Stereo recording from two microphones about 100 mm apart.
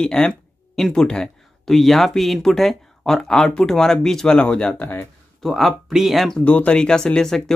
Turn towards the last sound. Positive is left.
turn(degrees=5)  # may be behind; listen again after turning